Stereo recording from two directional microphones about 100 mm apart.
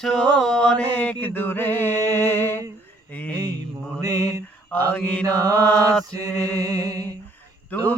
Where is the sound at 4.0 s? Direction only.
40° right (ahead or behind).